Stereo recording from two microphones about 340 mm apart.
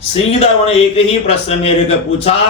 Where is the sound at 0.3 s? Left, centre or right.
Centre.